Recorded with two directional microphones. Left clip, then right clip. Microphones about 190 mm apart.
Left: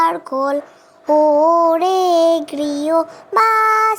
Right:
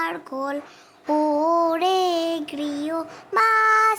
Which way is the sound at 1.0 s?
5° left (ahead or behind).